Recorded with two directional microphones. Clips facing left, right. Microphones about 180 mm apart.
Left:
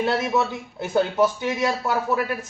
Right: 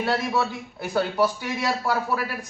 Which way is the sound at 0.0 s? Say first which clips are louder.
Left 2 dB; 20° left (ahead or behind).